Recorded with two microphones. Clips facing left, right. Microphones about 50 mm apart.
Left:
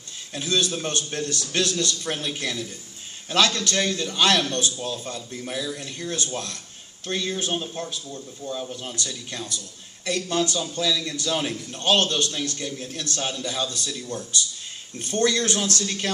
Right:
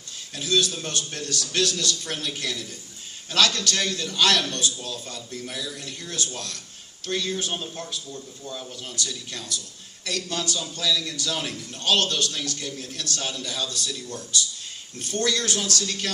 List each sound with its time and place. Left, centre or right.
0.3 s a man's voice: left
8.4 s speech: centre
8.7 s a man's voice: left